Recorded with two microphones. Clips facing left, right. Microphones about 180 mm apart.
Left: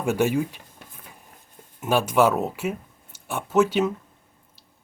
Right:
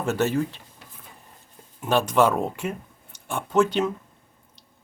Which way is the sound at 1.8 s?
10° left (ahead or behind).